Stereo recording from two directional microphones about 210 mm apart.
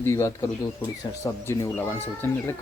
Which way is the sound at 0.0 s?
10° left (ahead or behind).